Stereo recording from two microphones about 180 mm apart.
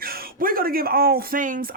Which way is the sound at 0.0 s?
55° right (ahead or behind).